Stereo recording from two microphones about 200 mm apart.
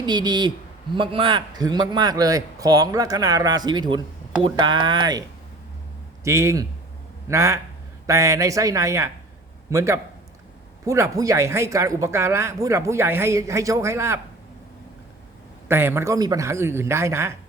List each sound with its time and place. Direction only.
0.0 s a man's voice: 20° right (ahead or behind)
6.2 s speech: 15° right (ahead or behind)
15.7 s speech: 10° right (ahead or behind)